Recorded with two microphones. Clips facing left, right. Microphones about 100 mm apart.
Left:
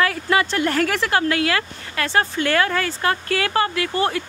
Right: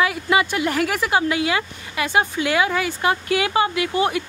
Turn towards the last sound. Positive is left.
turn(degrees=-15)  # may be behind; listen again after turning